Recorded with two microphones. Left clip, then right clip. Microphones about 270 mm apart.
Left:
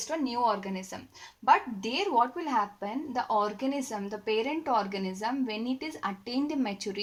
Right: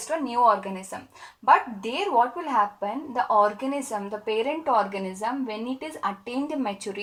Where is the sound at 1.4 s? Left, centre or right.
Centre.